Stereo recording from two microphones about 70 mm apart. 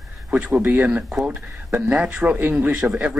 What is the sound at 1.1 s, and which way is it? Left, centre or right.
Speech, centre.